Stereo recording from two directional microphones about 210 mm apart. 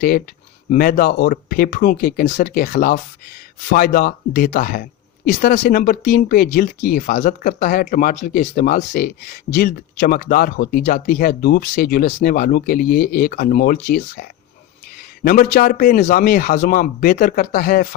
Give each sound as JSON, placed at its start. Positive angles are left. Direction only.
{"t": 0.7, "sound": "a man's voice", "side_deg": 45}